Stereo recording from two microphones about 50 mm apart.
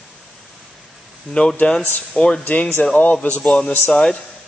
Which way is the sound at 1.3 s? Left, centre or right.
Centre.